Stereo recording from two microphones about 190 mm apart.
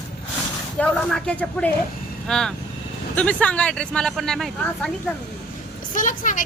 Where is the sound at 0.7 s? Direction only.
5° left (ahead or behind).